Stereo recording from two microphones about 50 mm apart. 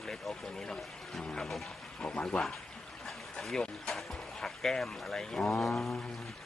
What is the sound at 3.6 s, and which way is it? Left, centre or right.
Speech, centre.